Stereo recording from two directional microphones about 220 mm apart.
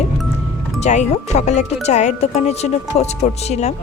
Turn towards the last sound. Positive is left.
turn(degrees=30)  # may be behind; listen again after turning